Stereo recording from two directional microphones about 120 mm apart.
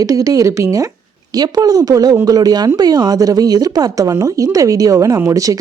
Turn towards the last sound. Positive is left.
turn(degrees=-25)  # may be behind; listen again after turning